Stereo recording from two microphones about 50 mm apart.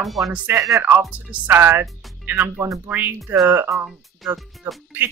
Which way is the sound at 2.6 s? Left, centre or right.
Right.